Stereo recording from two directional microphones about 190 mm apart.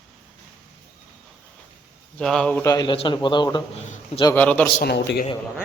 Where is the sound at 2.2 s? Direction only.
5° left (ahead or behind).